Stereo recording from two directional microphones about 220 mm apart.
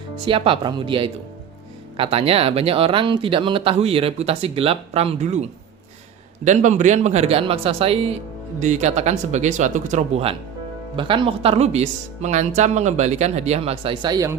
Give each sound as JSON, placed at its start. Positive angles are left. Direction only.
{"t": 0.3, "sound": "speech", "side_deg": -25}